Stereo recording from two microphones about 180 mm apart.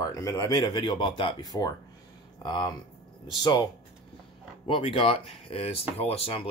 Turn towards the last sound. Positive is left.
turn(degrees=30)  # may be behind; listen again after turning